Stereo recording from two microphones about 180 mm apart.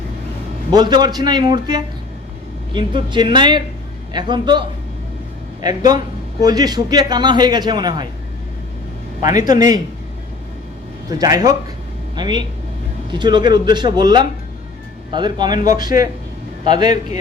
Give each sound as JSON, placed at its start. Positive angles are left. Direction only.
{"t": 0.7, "sound": "speech", "side_deg": -25}
{"t": 5.6, "sound": "speech", "side_deg": -20}
{"t": 9.2, "sound": "speech", "side_deg": -20}
{"t": 11.1, "sound": "speech", "side_deg": -20}